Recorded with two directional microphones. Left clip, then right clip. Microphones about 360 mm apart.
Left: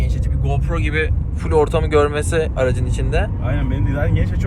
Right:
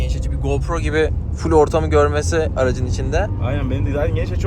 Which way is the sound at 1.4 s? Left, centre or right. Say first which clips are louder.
Right 2 dB; centre.